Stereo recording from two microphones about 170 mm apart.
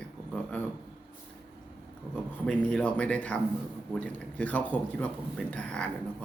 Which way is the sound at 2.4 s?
5° left (ahead or behind).